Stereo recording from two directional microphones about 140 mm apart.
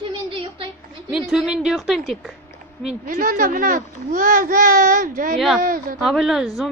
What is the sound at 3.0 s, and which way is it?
A child's voice, 85° right.